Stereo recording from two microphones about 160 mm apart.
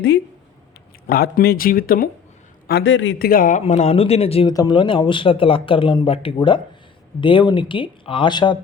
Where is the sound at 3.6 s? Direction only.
40° left (ahead or behind).